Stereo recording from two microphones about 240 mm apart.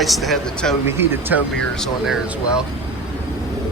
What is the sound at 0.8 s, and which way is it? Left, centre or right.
A man's voice, centre.